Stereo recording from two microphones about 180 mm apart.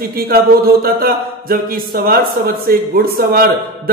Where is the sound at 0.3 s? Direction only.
55° right (ahead or behind).